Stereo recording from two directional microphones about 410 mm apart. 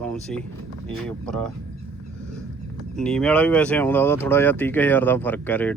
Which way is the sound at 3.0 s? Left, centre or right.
Centre.